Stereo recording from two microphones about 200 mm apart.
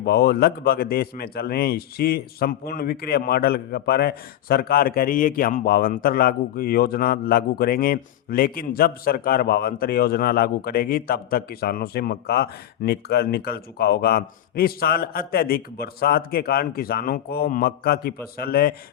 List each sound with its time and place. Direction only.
0.0 s speech: 50° left (ahead or behind)